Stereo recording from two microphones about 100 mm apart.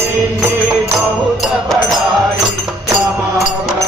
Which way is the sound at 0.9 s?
Centre (ahead or behind).